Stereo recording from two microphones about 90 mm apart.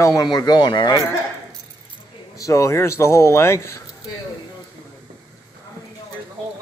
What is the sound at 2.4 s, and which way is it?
Speech, 35° left (ahead or behind).